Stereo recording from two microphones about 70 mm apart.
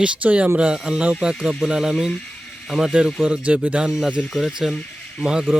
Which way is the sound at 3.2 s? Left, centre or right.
Centre.